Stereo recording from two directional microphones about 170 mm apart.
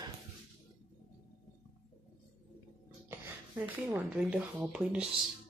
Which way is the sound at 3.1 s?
10° right (ahead or behind).